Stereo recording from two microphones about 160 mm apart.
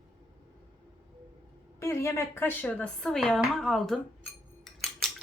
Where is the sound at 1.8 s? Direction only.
15° left (ahead or behind); by 4.0 s centre (ahead or behind).